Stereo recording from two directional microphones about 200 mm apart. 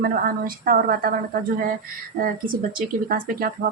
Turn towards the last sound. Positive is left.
turn(degrees=-45)  # may be behind; listen again after turning